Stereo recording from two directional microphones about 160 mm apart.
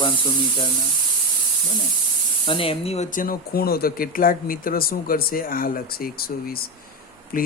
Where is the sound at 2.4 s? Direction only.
35° left (ahead or behind).